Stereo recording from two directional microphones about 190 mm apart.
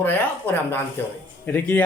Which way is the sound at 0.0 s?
10° left (ahead or behind).